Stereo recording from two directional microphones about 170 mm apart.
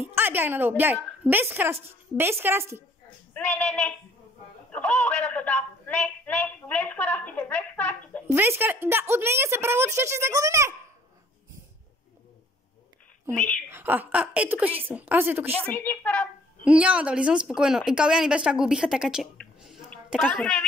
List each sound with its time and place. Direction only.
0.1 s a woman's voice: 10° right (ahead or behind)
3.3 s speech: 10° left (ahead or behind)
4.7 s a sound: 10° left (ahead or behind)
8.3 s a woman's voice: 15° right (ahead or behind)
13.3 s a woman's voice: 15° right (ahead or behind)
15.6 s a woman's voice: 10° left (ahead or behind)
16.6 s a woman's voice: 5° right (ahead or behind)